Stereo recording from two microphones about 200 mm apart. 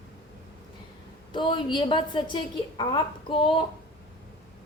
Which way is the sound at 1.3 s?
25° left (ahead or behind).